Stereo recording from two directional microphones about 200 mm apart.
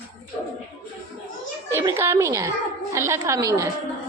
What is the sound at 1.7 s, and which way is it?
A woman's voice, 15° right (ahead or behind).